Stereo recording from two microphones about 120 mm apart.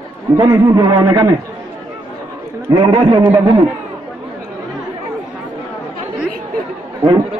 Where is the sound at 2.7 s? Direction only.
40° right (ahead or behind).